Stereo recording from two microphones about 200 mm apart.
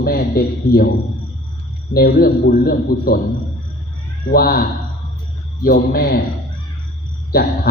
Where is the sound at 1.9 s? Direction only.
50° left (ahead or behind).